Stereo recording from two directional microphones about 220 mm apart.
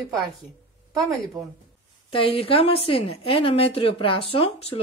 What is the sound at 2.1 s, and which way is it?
A woman's voice, 25° left (ahead or behind).